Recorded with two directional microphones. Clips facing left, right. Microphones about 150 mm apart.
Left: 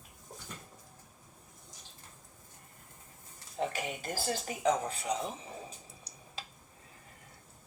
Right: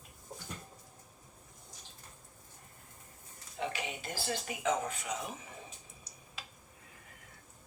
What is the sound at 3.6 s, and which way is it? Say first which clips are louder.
Speech: left 3 dB; 45° left (ahead or behind).